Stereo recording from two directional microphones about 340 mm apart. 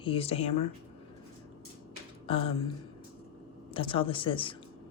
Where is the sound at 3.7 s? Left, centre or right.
Centre.